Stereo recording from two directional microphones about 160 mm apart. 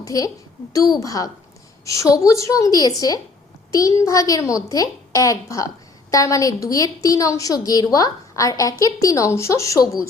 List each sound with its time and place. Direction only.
0.0 s a woman's voice: 20° left (ahead or behind)